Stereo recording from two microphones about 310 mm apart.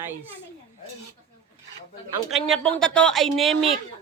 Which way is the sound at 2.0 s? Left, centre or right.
Centre.